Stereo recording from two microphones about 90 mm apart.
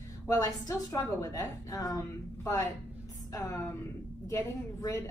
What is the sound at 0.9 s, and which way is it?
A woman's voice, 35° left (ahead or behind).